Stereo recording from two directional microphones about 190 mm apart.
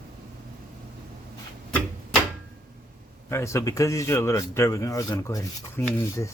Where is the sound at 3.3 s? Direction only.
15° left (ahead or behind).